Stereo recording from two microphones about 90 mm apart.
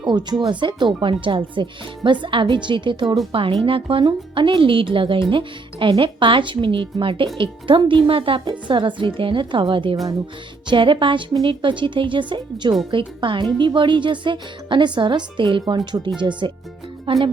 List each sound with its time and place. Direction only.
0.0 s speech: 55° right (ahead or behind)
3.7 s speech: 85° right; by 7.9 s 70° right (ahead or behind)
8.0 s speech: 90° right
8.4 s speech: 60° right (ahead or behind)
17.1 s speech: 75° right (ahead or behind)